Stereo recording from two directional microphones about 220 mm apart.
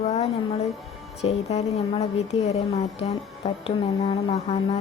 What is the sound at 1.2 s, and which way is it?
Speech, 30° left (ahead or behind).